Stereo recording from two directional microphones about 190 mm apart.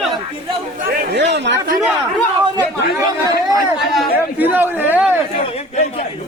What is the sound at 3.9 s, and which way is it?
A man's voice, 10° right (ahead or behind).